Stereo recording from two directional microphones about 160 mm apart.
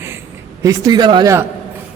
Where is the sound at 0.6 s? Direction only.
25° right (ahead or behind).